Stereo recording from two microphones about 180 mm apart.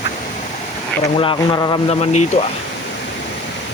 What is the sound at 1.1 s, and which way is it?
Speech, 25° left (ahead or behind).